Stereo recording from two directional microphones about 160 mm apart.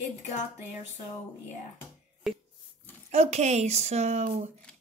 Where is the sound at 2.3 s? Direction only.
Centre (ahead or behind).